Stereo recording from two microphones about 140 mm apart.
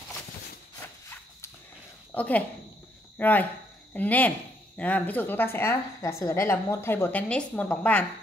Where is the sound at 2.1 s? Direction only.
10° left (ahead or behind).